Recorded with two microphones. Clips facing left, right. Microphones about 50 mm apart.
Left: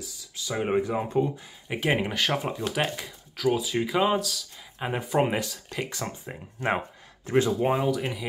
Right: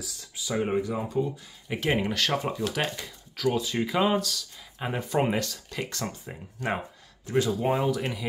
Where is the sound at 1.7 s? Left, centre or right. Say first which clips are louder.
Left 1 dB; centre.